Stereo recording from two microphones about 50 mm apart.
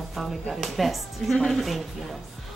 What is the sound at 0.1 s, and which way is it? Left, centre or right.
A woman's voice, centre.